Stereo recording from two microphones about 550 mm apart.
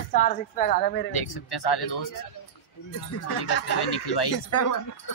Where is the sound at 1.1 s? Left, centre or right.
Left.